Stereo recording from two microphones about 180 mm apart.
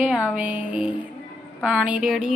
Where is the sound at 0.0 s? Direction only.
5° right (ahead or behind).